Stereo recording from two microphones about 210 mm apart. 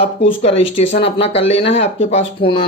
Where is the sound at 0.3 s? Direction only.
25° left (ahead or behind).